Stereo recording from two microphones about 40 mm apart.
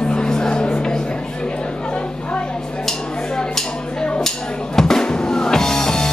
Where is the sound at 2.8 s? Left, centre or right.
Centre.